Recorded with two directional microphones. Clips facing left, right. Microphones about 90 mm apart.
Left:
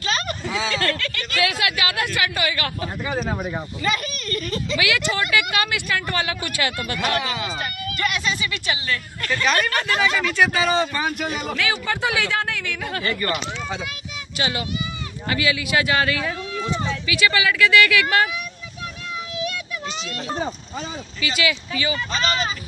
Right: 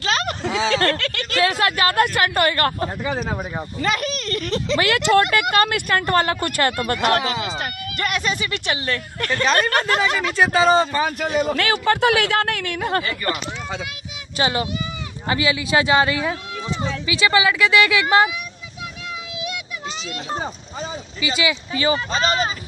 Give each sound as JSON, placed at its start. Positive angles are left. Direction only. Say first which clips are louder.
{"t": 0.0, "sound": "a sound", "louder": "right 3 dB", "side_deg": -70}
{"t": 0.8, "sound": "speech", "louder": "right 3 dB", "side_deg": -65}
{"t": 1.3, "sound": "speech", "louder": "right 4 dB", "side_deg": -35}
{"t": 3.2, "sound": "speech", "louder": "even", "side_deg": -5}
{"t": 3.8, "sound": "speech", "louder": "right 3 dB", "side_deg": -65}
{"t": 4.7, "sound": "speech", "louder": "right 7 dB", "side_deg": -50}
{"t": 5.3, "sound": "speech", "louder": "right 4 dB", "side_deg": -50}
{"t": 9.4, "sound": "speech", "louder": "right 2 dB", "side_deg": -35}
{"t": 9.7, "sound": "speech", "louder": "right 2 dB", "side_deg": -55}
{"t": 10.3, "sound": "speech", "louder": "right 7 dB", "side_deg": -35}
{"t": 11.5, "sound": "speech", "louder": "right 5 dB", "side_deg": -60}
{"t": 13.0, "sound": "speech", "louder": "left 2 dB", "side_deg": -10}
{"t": 14.4, "sound": "speech", "louder": "right 4 dB", "side_deg": -35}
{"t": 21.2, "sound": "speech", "louder": "right 1 dB", "side_deg": -25}